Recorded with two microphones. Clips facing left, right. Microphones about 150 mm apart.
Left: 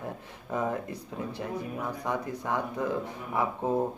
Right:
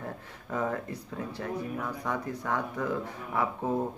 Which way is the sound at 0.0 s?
15° left (ahead or behind).